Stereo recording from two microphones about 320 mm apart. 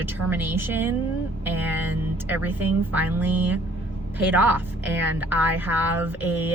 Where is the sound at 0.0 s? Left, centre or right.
Centre.